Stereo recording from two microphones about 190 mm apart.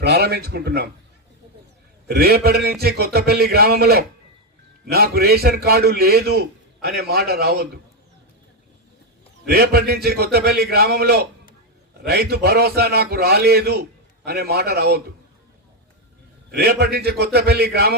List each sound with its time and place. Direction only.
0.0 s a man's voice: 60° right (ahead or behind)
2.0 s a man's voice: 55° right (ahead or behind)
9.5 s a man's voice: 55° right (ahead or behind)
16.5 s a man's voice: 60° right (ahead or behind)